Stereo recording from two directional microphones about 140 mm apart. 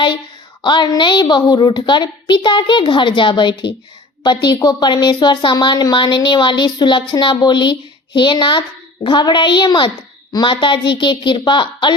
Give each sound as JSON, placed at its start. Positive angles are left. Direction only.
{"t": 0.6, "sound": "a woman's voice", "side_deg": 30}